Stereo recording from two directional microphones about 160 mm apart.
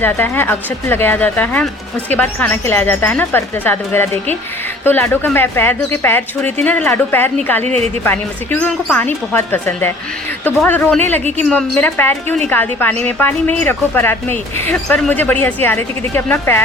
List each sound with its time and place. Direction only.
0.0 s a woman's voice: 10° left (ahead or behind)
7.6 s speech: 45° right (ahead or behind)
8.0 s a woman's voice: 10° left (ahead or behind)